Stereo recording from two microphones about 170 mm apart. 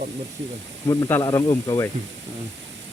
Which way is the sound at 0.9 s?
20° left (ahead or behind).